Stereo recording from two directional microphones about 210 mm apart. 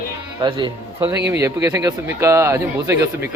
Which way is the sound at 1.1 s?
55° right (ahead or behind).